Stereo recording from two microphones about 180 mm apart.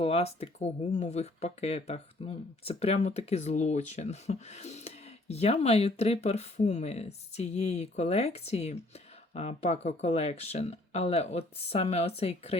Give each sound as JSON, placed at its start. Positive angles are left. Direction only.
{"t": 0.0, "sound": "speech", "side_deg": 35}